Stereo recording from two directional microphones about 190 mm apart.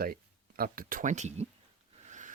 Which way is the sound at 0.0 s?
50° right (ahead or behind).